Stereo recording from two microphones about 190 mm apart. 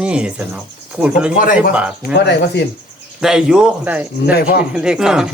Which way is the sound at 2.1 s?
60° left (ahead or behind).